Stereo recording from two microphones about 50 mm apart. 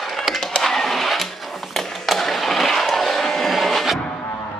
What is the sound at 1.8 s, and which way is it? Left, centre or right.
Skateboard, centre.